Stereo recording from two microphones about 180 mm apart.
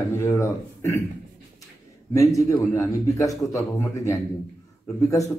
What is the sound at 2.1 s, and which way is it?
A man's voice, 20° left (ahead or behind).